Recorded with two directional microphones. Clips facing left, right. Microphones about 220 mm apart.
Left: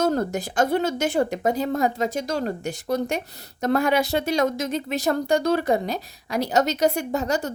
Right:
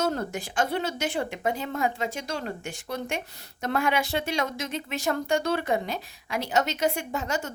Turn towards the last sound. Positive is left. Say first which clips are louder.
# left 6 dB
turn(degrees=40)  # may be behind; listen again after turning